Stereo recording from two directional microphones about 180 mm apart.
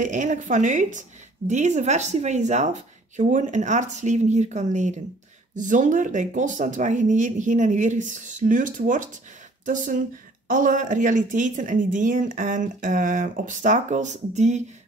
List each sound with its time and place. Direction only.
0.0 s a woman's voice: 45° right (ahead or behind)